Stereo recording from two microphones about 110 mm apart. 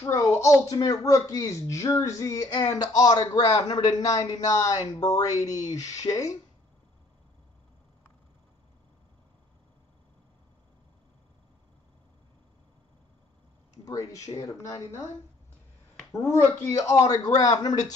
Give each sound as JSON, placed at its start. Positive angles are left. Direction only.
{"t": 0.0, "sound": "a woman's voice", "side_deg": 30}
{"t": 13.8, "sound": "speech", "side_deg": 30}
{"t": 16.2, "sound": "speech", "side_deg": 25}